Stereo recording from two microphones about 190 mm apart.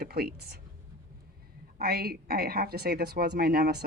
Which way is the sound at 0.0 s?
55° right (ahead or behind).